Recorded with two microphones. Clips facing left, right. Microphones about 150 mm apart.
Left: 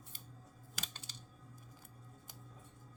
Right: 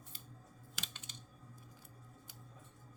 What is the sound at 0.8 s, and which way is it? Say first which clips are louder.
Typing: left 1 dB; 35° left (ahead or behind).